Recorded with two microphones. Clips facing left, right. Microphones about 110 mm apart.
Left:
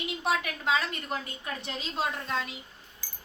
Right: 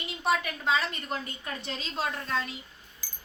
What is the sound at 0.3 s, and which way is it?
A woman's voice, 5° left (ahead or behind).